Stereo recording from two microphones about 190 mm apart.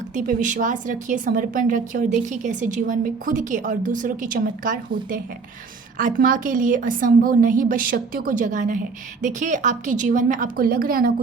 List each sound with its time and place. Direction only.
0.1 s a woman's voice: 40° right (ahead or behind)
6.0 s a woman's voice: 45° right (ahead or behind)